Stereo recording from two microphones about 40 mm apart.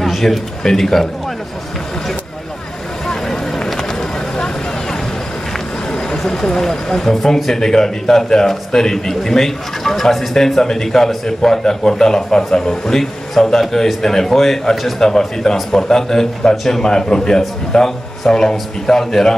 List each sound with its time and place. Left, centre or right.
0.0 s a sound: centre
0.7 s a man's voice: centre
5.9 s a man's voice: centre